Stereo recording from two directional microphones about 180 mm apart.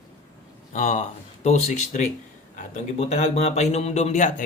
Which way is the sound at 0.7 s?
40° left (ahead or behind).